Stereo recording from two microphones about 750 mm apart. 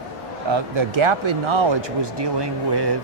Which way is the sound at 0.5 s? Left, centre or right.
Right.